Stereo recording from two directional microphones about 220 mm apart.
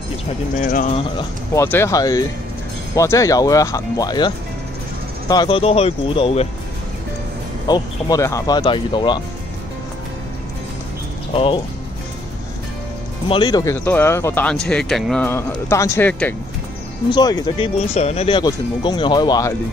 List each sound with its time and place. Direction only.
0.6 s speech: 35° left (ahead or behind)
1.5 s speech: 10° left (ahead or behind)
5.3 s speech: 20° left (ahead or behind)
7.6 s speech: 15° left (ahead or behind)
11.3 s speech: 25° left (ahead or behind)
13.3 s speech: 20° left (ahead or behind)
17.1 s speech: 20° left (ahead or behind)
17.7 s speech: 30° left (ahead or behind)